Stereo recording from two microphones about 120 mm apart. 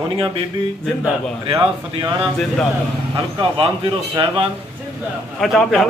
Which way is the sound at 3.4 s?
55° right (ahead or behind).